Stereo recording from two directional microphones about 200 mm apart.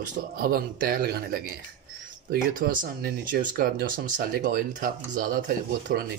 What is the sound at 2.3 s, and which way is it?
Speech, 40° right (ahead or behind).